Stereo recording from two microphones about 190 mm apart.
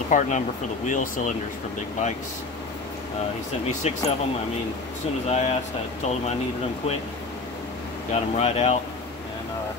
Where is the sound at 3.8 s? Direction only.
35° left (ahead or behind).